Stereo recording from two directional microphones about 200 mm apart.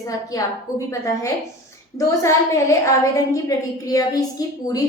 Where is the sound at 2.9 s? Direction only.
15° left (ahead or behind).